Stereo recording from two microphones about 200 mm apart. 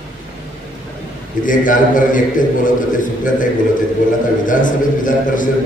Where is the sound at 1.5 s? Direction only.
40° left (ahead or behind).